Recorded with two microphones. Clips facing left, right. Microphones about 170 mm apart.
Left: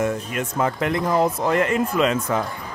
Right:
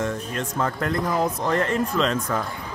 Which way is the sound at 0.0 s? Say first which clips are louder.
Left 3 dB; 10° left (ahead or behind).